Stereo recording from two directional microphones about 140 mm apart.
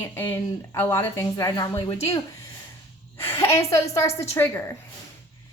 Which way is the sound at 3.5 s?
20° left (ahead or behind).